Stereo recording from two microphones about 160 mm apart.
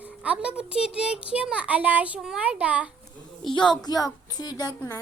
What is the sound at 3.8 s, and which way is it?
Speech, 25° left (ahead or behind).